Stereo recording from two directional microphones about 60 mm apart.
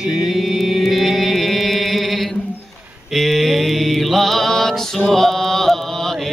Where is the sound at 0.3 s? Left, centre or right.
Centre.